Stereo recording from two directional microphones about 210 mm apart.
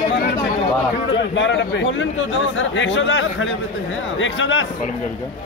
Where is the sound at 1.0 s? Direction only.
60° left (ahead or behind).